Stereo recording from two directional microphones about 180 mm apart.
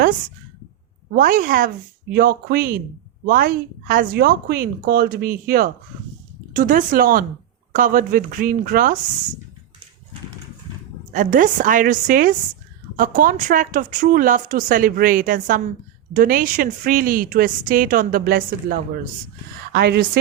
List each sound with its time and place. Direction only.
1.1 s a woman's voice: 50° right (ahead or behind)
11.1 s a woman's voice: 45° right (ahead or behind); by 20.1 s 60° right (ahead or behind)